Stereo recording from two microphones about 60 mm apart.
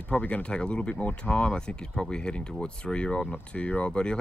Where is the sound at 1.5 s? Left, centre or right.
Centre.